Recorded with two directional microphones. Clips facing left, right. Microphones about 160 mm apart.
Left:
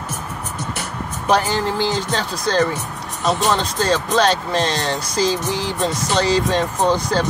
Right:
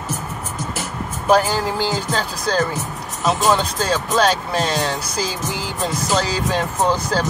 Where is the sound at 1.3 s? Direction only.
5° right (ahead or behind).